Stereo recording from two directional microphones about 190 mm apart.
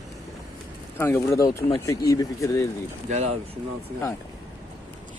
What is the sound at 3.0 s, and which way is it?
Speech, 35° right (ahead or behind).